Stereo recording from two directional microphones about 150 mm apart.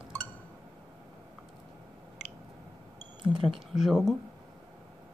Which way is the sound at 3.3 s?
35° right (ahead or behind).